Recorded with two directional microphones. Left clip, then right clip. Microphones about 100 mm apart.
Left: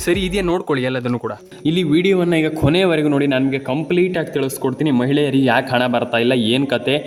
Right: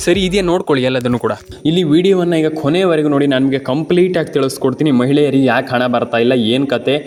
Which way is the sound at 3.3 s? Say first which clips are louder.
Right 4 dB; 35° right (ahead or behind).